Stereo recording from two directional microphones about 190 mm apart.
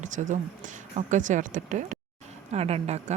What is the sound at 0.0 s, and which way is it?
A woman's voice, 40° right (ahead or behind).